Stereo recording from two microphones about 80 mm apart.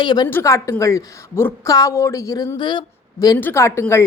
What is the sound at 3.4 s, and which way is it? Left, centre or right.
Speech, left.